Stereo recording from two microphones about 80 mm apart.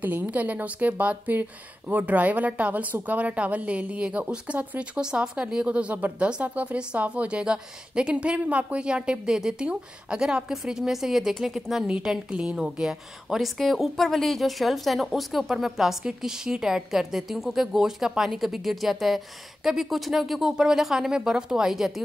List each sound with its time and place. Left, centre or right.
0.0 s a woman's voice: right; by 22.0 s centre